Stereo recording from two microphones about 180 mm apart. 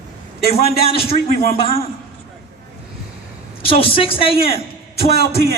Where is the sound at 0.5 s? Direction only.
35° left (ahead or behind).